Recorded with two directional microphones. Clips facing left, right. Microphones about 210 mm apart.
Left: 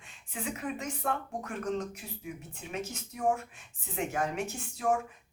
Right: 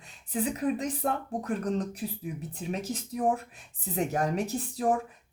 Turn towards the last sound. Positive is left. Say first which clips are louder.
# right 3 dB
turn(degrees=-35)  # may be behind; listen again after turning